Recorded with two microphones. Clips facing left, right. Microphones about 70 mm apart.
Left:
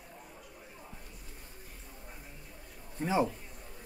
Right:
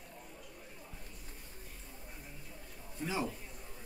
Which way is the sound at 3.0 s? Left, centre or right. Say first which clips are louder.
Left 7 dB; left.